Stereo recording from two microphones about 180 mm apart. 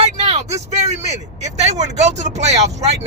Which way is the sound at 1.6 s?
40° right (ahead or behind).